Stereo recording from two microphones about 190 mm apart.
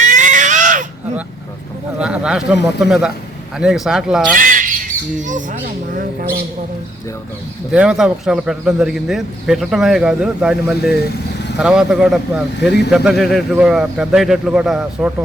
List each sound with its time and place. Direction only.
0.0 s a sound: 40° right (ahead or behind)
2.0 s a man's voice: 5° right (ahead or behind)
4.4 s squawk: 45° right (ahead or behind)
7.7 s a man's voice: 5° right (ahead or behind)